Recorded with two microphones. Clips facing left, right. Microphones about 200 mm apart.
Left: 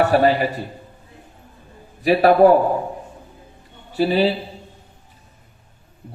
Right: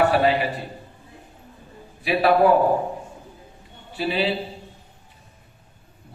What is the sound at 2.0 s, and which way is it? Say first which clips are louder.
Speech: left 5 dB; 45° left (ahead or behind).